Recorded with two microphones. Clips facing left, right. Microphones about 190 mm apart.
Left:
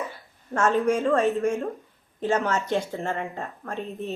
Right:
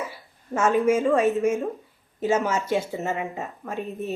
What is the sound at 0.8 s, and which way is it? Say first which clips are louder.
Speech: right 4 dB; 5° right (ahead or behind).